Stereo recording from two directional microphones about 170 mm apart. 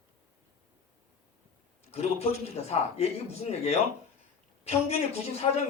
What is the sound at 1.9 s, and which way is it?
A woman's voice, 35° left (ahead or behind).